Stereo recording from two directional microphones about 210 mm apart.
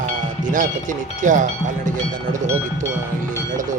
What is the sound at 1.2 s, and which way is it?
Speech, 35° right (ahead or behind).